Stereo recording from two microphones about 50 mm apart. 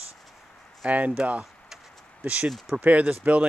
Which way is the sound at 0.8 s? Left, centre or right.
Right.